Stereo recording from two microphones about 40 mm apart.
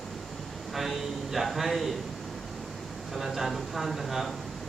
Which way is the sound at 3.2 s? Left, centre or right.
Centre.